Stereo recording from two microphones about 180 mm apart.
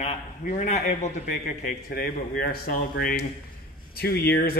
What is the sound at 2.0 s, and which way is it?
Speech, 55° left (ahead or behind).